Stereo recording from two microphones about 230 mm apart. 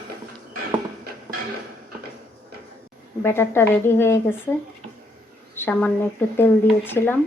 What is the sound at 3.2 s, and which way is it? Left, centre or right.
Speech, centre.